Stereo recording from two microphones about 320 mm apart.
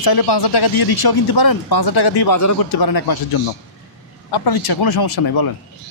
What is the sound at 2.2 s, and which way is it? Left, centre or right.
Speech, left.